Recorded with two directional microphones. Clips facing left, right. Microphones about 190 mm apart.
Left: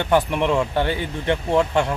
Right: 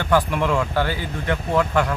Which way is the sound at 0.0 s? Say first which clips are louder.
Left 1 dB; 20° left (ahead or behind).